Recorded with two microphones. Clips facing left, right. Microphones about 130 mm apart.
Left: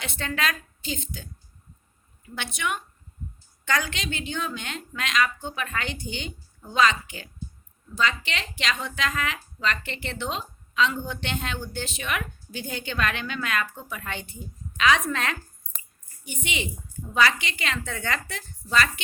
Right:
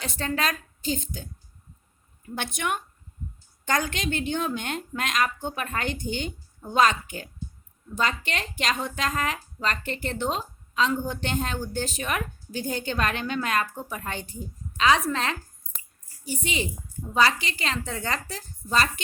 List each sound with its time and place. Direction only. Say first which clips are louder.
0.0 s a woman's voice: right 1 dB; 40° right (ahead or behind)